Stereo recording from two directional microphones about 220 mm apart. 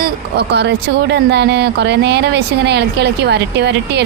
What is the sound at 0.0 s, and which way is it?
Speech, 50° right (ahead or behind).